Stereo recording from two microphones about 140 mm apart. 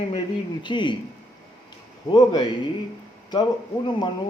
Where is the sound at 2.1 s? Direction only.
30° left (ahead or behind).